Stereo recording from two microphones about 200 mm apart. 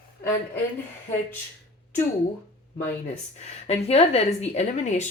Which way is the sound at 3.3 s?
35° left (ahead or behind).